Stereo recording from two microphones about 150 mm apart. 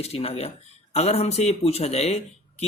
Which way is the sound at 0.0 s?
45° left (ahead or behind).